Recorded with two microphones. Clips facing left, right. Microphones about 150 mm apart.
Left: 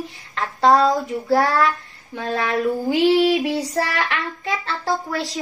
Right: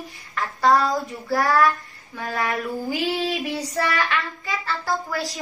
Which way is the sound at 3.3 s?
Centre (ahead or behind).